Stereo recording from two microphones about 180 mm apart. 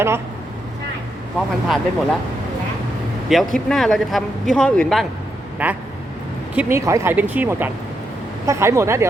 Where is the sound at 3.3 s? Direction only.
Centre (ahead or behind).